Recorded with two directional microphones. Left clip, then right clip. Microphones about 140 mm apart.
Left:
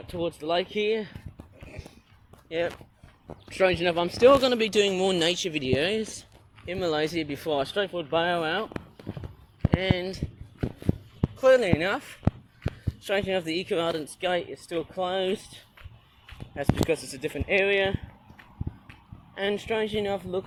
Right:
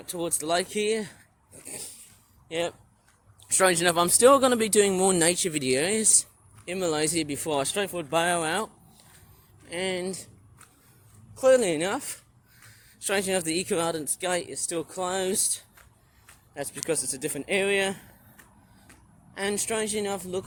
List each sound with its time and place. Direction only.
0.0 s a man's voice: 40° right (ahead or behind)
2.5 s a man's voice: 45° right (ahead or behind); by 4.7 s 30° right (ahead or behind)
4.7 s a man's voice: 45° right (ahead or behind)
6.7 s a man's voice: 65° right (ahead or behind)
11.3 s a man's voice: 65° right (ahead or behind)
16.9 s a man's voice: 45° right (ahead or behind)
19.3 s a man's voice: 45° right (ahead or behind)